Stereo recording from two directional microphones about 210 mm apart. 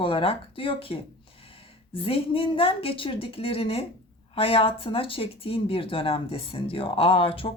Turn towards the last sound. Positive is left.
turn(degrees=25)  # may be behind; listen again after turning